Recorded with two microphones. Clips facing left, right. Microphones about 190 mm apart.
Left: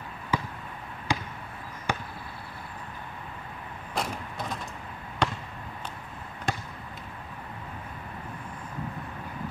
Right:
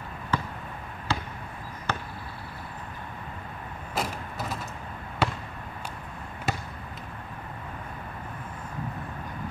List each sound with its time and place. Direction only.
0.3 s basketball bounce: 10° left (ahead or behind)
3.9 s vehicle: 5° right (ahead or behind)
5.2 s basketball bounce: 5° right (ahead or behind)
6.5 s basketball bounce: 5° right (ahead or behind)